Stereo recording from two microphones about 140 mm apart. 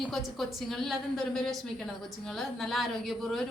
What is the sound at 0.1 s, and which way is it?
A woman's voice, centre (ahead or behind).